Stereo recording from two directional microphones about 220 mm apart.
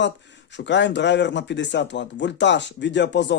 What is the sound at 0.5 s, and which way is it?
Speech, 55° left (ahead or behind).